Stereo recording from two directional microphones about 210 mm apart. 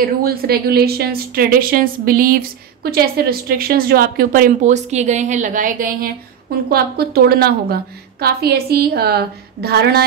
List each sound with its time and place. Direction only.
0.0 s a woman's voice: 45° right (ahead or behind)